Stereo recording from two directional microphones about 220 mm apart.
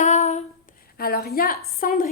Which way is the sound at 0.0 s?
30° left (ahead or behind).